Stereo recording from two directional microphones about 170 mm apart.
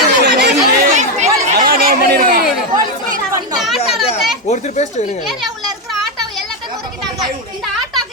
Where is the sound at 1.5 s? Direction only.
60° right (ahead or behind).